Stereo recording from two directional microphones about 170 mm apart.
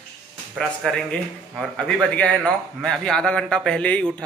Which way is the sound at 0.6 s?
5° left (ahead or behind).